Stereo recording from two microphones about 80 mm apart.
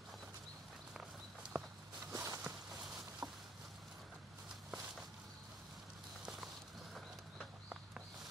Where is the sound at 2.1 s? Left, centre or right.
Right.